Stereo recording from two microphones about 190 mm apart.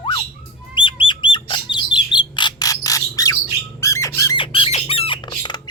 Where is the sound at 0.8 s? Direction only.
25° left (ahead or behind).